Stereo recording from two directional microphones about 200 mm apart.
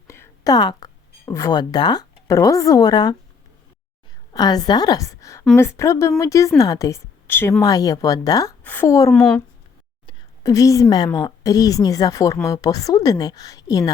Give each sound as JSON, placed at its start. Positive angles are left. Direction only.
{"t": 0.1, "sound": "speech", "side_deg": 15}
{"t": 4.3, "sound": "a woman's voice", "side_deg": 20}
{"t": 9.1, "sound": "speech", "side_deg": 5}
{"t": 10.1, "sound": "a woman's voice", "side_deg": 15}